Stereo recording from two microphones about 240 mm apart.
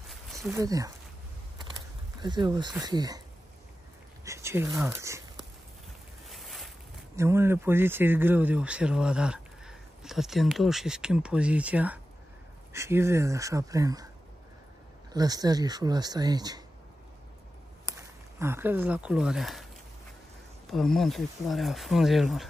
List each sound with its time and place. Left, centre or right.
0.5 s speech: centre
2.2 s speech: centre
4.2 s speech: centre
6.2 s boat: centre
7.2 s speech: centre
15.1 s speech: centre
18.4 s speech: centre
20.7 s speech: centre